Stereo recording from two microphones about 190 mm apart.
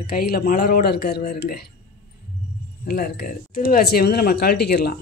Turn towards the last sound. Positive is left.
turn(degrees=55)  # may be behind; listen again after turning